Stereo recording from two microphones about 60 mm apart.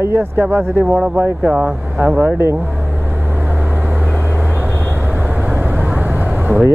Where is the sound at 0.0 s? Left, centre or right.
Right.